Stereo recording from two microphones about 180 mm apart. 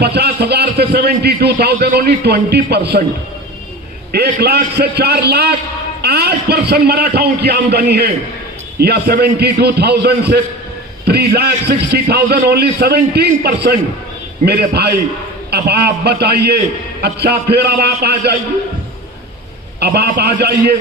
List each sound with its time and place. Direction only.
0.0 s a man's voice: 65° right (ahead or behind)
4.1 s a man's voice: 65° right (ahead or behind)
19.8 s a man's voice: 65° right (ahead or behind)